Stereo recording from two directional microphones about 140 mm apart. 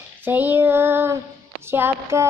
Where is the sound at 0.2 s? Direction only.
15° right (ahead or behind).